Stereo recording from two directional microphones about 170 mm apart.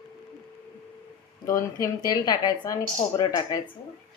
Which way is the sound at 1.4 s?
20° left (ahead or behind).